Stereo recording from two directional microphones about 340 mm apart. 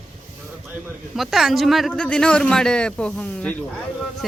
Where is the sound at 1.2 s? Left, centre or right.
Centre.